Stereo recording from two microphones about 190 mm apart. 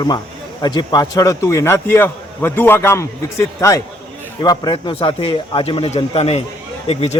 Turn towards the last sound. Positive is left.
turn(degrees=35)  # may be behind; listen again after turning